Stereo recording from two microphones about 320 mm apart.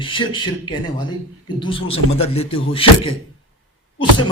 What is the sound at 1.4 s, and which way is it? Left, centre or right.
A man's voice, centre.